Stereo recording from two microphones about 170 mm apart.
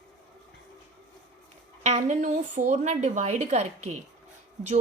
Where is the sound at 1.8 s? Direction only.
45° right (ahead or behind).